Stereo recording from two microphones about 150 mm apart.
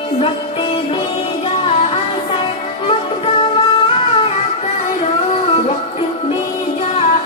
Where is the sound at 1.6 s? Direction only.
40° left (ahead or behind).